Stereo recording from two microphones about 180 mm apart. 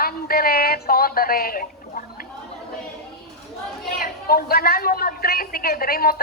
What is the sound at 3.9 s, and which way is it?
Speech, 55° left (ahead or behind).